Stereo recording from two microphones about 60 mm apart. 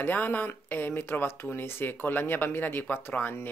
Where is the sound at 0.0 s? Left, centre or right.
Left.